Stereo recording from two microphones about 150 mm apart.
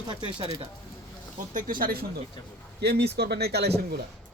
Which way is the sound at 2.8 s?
90° right.